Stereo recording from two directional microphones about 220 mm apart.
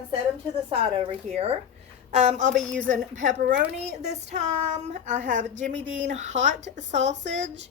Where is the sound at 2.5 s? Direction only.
Centre (ahead or behind).